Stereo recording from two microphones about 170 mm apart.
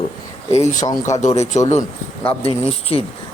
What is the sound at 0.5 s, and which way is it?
A man's voice, 45° left (ahead or behind).